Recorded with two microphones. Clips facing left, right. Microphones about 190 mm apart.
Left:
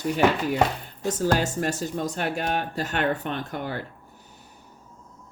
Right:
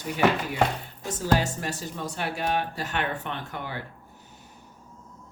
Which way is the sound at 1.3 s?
50° left (ahead or behind).